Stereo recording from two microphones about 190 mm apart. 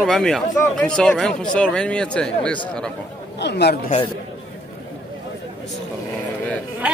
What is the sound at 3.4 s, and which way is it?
Speech, 60° left (ahead or behind).